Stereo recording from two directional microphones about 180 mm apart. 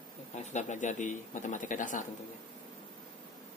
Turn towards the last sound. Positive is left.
turn(degrees=45)  # may be behind; listen again after turning